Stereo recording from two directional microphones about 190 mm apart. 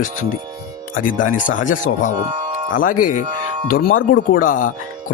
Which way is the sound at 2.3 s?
40° right (ahead or behind).